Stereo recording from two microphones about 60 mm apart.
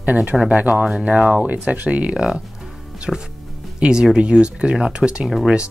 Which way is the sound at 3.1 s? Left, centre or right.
Centre.